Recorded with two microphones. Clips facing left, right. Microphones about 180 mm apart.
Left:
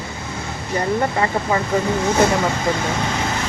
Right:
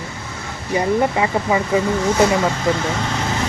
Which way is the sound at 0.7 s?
10° right (ahead or behind).